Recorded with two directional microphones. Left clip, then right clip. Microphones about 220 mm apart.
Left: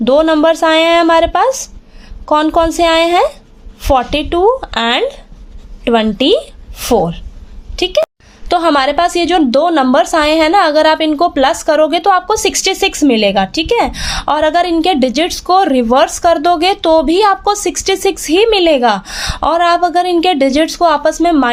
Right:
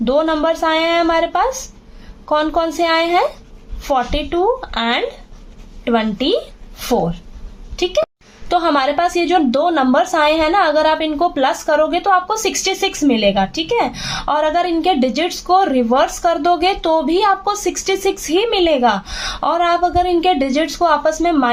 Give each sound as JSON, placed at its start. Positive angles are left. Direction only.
{"t": 0.0, "sound": "a woman's voice", "side_deg": 40}
{"t": 8.4, "sound": "a woman's voice", "side_deg": 40}